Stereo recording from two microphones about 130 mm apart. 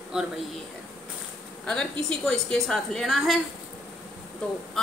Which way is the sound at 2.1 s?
5° left (ahead or behind).